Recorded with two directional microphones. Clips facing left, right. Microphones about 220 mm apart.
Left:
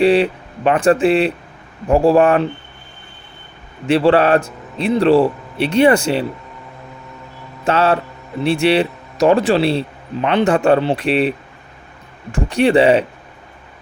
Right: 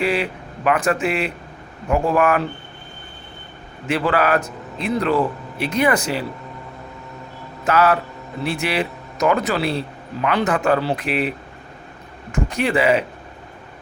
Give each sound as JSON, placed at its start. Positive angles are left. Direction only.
{"t": 0.0, "sound": "speech", "side_deg": 30}
{"t": 3.8, "sound": "speech", "side_deg": 30}
{"t": 7.6, "sound": "speech", "side_deg": 30}